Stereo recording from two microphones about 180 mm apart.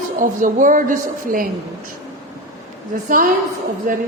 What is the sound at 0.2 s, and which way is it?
A woman's voice, 50° right (ahead or behind).